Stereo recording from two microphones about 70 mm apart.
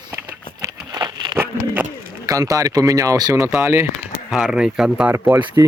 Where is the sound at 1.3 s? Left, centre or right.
Right.